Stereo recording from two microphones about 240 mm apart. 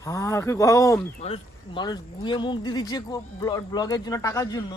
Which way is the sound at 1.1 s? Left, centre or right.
Left.